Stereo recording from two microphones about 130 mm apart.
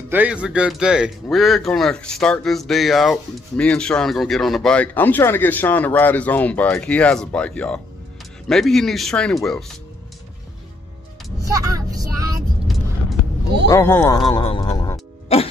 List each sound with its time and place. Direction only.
0.1 s speech: 10° right (ahead or behind)
11.5 s speech: 25° right (ahead or behind)
13.7 s speech: 20° left (ahead or behind)
14.4 s speech: 40° left (ahead or behind)
15.3 s music: 50° left (ahead or behind)